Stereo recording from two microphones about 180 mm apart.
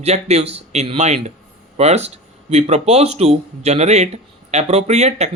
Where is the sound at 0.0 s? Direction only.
35° right (ahead or behind).